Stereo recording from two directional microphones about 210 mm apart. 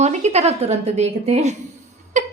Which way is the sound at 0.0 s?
30° right (ahead or behind).